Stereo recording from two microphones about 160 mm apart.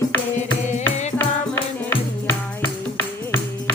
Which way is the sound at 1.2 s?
15° left (ahead or behind).